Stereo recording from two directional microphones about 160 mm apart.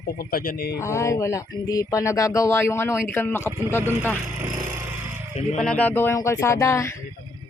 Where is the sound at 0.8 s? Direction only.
15° left (ahead or behind).